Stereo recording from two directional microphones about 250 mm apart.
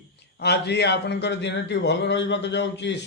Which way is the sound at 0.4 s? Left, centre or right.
Left.